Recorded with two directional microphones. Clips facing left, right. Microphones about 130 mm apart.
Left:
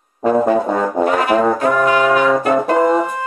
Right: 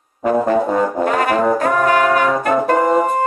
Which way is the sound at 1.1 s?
45° right (ahead or behind).